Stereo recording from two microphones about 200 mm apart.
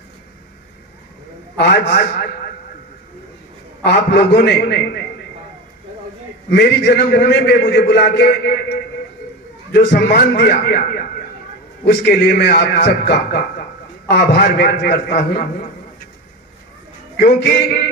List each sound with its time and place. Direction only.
1.5 s a man's voice: 55° left (ahead or behind)
3.8 s a man's voice: 55° left (ahead or behind)
6.5 s a man's voice: 60° left (ahead or behind)
17.2 s a man's voice: 50° left (ahead or behind)